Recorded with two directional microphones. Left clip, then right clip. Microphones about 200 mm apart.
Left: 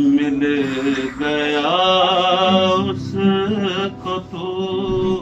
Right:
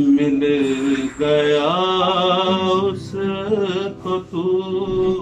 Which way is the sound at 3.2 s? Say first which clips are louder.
Left 1 dB; 20° right (ahead or behind).